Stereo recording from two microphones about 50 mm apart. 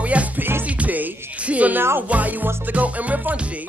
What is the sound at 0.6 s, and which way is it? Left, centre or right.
Music, right.